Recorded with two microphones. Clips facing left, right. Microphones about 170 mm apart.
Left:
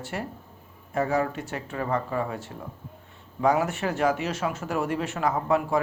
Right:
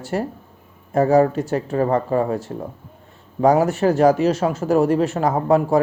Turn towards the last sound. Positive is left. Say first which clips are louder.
# right 7 dB
turn(degrees=-35)  # may be behind; listen again after turning